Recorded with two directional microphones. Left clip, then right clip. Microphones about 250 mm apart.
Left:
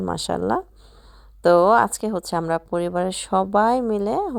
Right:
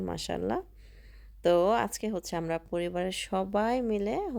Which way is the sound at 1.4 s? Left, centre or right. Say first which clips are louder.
Left 10 dB; centre.